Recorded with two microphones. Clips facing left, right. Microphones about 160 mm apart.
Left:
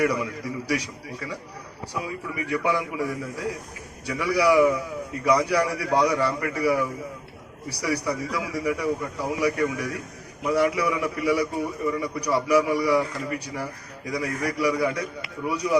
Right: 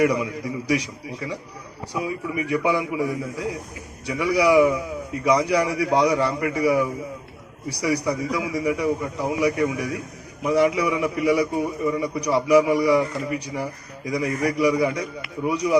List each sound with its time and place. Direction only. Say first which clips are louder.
0.0 s a man's voice: right 3 dB; 15° right (ahead or behind)